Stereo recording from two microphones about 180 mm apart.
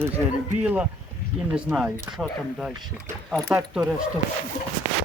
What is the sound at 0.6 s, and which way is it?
Speech, 5° right (ahead or behind).